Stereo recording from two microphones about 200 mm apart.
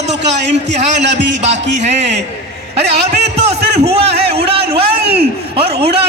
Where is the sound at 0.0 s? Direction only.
35° right (ahead or behind).